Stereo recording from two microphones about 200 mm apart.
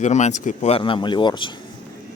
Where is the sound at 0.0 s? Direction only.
35° left (ahead or behind).